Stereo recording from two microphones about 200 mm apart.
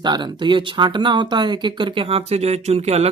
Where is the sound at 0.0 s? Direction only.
20° right (ahead or behind).